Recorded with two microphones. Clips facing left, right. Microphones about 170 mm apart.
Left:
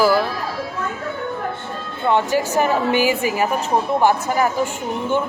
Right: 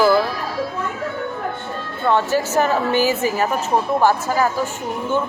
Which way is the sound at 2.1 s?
15° left (ahead or behind).